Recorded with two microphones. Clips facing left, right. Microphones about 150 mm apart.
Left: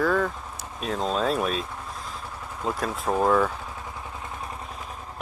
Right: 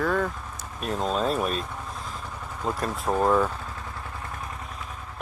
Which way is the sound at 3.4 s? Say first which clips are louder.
Left 1 dB; 10° left (ahead or behind).